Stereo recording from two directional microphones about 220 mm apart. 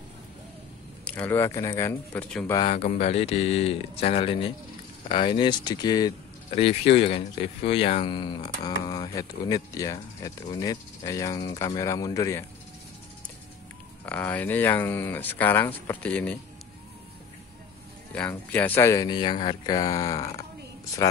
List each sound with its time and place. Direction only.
1.0 s speech: 5° left (ahead or behind)
2.5 s speech: 30° left (ahead or behind)
14.0 s speech: 5° left (ahead or behind)
18.1 s speech: 5° left (ahead or behind)